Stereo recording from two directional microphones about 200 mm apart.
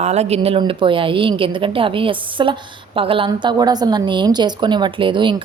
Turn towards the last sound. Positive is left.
turn(degrees=-25)  # may be behind; listen again after turning